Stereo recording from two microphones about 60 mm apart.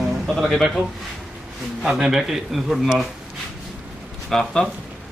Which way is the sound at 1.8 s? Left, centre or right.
Centre.